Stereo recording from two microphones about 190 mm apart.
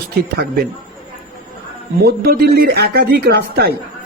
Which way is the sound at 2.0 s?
55° right (ahead or behind).